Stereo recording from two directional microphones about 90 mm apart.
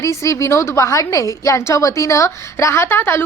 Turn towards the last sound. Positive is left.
turn(degrees=25)  # may be behind; listen again after turning